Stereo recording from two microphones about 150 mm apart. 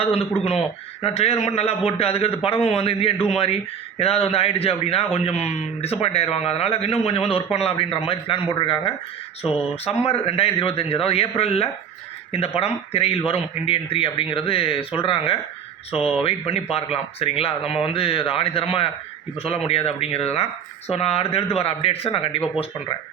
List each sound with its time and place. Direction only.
0.0 s a man's voice: 40° left (ahead or behind)